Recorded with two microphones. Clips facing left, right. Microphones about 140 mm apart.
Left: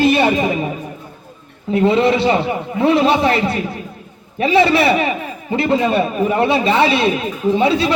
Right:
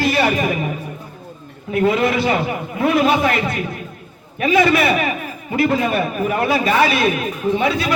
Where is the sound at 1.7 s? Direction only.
30° left (ahead or behind).